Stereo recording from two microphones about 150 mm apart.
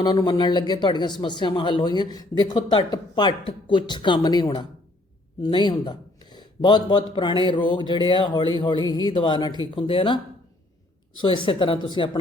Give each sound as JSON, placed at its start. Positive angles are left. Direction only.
{"t": 0.0, "sound": "a man's voice", "side_deg": 25}
{"t": 11.2, "sound": "a man's voice", "side_deg": 30}